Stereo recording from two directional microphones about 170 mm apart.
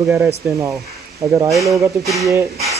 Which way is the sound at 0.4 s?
10° right (ahead or behind).